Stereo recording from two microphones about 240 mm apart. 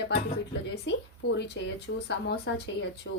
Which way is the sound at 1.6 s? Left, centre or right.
Left.